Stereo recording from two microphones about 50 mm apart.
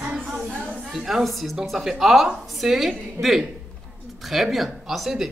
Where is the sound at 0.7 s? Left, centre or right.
Centre.